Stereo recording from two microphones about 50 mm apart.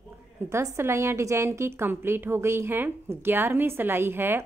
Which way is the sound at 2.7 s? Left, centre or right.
Right.